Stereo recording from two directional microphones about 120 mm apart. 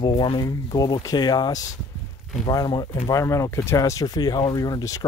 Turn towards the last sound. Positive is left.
turn(degrees=30)  # may be behind; listen again after turning